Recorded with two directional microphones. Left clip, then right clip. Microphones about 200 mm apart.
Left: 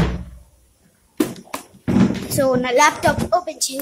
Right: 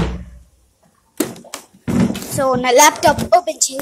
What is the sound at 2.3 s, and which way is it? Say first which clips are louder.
Speech: right 1 dB; centre (ahead or behind).